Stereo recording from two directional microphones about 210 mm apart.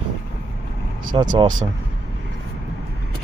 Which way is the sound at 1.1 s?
20° right (ahead or behind).